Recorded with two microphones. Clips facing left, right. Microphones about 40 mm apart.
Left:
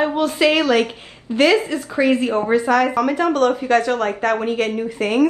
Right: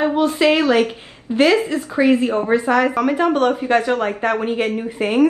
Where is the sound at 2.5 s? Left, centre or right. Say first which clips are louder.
Even; centre.